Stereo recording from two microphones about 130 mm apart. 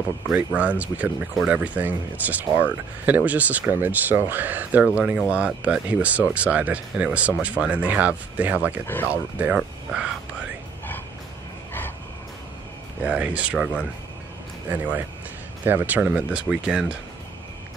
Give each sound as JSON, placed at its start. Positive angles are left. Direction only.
{"t": 0.3, "sound": "speech", "side_deg": -10}
{"t": 8.8, "sound": "speech", "side_deg": 15}
{"t": 9.1, "sound": "speech", "side_deg": -10}
{"t": 13.0, "sound": "speech", "side_deg": -10}